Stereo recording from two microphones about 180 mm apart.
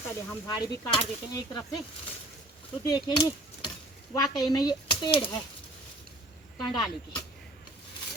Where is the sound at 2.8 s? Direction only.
25° left (ahead or behind).